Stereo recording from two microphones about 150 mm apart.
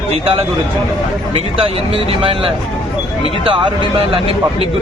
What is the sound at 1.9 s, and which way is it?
A man's voice, 35° right (ahead or behind).